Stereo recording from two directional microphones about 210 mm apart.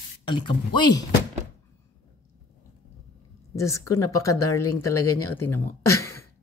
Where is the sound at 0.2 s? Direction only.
20° left (ahead or behind).